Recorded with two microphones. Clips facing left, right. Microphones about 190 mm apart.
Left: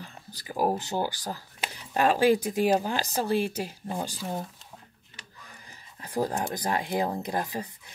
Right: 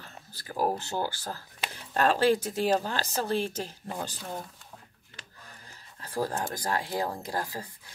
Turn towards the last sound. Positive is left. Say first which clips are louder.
# left 3 dB
turn(degrees=20)  # may be behind; listen again after turning